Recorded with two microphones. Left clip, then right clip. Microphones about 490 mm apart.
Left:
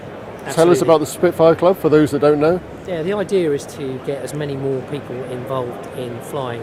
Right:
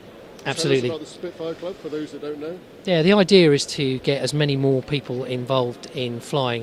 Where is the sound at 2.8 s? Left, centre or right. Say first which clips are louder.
Right 5 dB; right.